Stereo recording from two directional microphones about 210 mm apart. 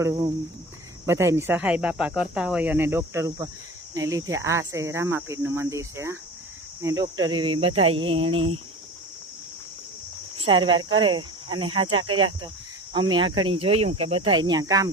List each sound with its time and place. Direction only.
0.0 s speech: 15° right (ahead or behind)
10.4 s speech: 25° right (ahead or behind)